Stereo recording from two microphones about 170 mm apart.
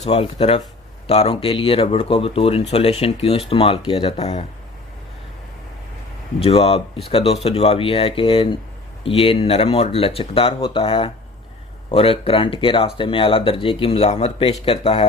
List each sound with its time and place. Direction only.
0.0 s speech: 40° left (ahead or behind)
6.4 s speech: 35° left (ahead or behind)